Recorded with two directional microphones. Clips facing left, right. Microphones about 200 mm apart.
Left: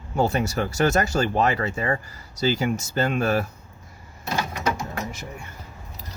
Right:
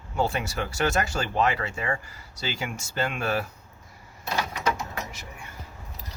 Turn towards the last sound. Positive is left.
turn(degrees=45)  # may be behind; listen again after turning